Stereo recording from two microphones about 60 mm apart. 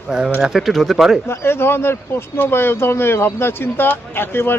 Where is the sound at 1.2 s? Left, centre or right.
Left.